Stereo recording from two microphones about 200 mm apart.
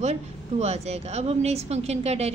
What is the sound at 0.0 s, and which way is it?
A woman's voice, 35° right (ahead or behind).